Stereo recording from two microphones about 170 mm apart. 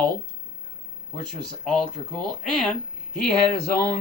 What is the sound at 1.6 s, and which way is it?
Speech, 5° left (ahead or behind).